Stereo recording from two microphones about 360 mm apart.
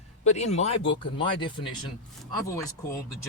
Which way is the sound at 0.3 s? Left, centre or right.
Centre.